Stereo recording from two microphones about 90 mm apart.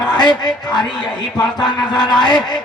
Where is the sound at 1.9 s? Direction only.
55° left (ahead or behind).